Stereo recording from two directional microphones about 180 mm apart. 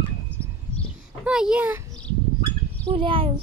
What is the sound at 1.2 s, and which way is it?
Speech, 5° right (ahead or behind).